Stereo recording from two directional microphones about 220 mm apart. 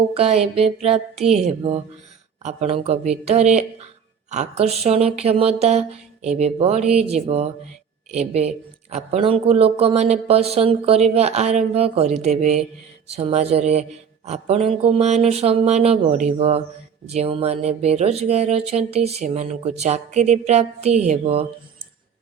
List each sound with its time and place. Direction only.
0.1 s speech: 30° right (ahead or behind)